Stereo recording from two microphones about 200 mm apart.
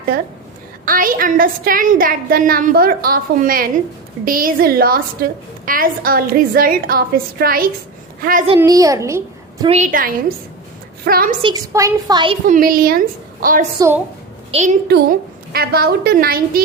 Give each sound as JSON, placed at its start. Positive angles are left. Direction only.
{"t": 0.9, "sound": "a woman's voice", "side_deg": -45}
{"t": 8.5, "sound": "a child's voice", "side_deg": -15}
{"t": 9.6, "sound": "a woman's voice", "side_deg": -35}
{"t": 11.4, "sound": "a woman's voice", "side_deg": -15}
{"t": 12.5, "sound": "a woman's voice", "side_deg": -45}
{"t": 13.7, "sound": "a woman's voice", "side_deg": -15}
{"t": 14.5, "sound": "a woman's voice", "side_deg": -35}
{"t": 14.8, "sound": "a woman's voice", "side_deg": -50}